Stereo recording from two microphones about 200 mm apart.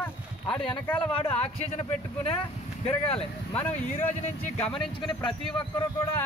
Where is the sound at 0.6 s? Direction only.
5° left (ahead or behind).